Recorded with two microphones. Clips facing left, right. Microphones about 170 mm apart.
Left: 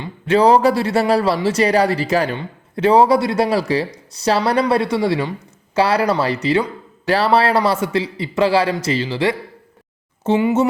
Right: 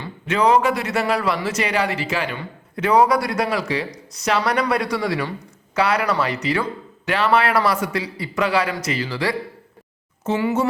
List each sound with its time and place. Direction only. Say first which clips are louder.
0.3 s speech: left 5 dB; 35° left (ahead or behind)
2.3 s speech: left 4 dB; 30° left (ahead or behind)